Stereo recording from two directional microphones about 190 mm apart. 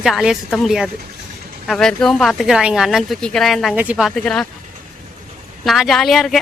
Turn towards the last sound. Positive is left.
turn(degrees=0)  # may be behind; listen again after turning